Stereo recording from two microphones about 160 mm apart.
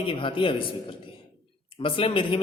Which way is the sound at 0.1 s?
35° left (ahead or behind).